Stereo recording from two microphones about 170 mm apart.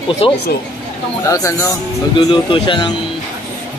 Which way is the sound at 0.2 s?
35° left (ahead or behind).